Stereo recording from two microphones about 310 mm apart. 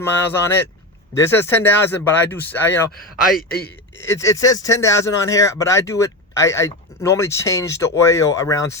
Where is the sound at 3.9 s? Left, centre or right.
Centre.